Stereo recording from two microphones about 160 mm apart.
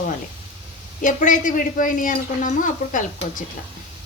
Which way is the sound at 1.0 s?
55° left (ahead or behind).